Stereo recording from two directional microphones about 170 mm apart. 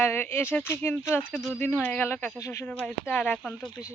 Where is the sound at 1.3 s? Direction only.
Centre (ahead or behind).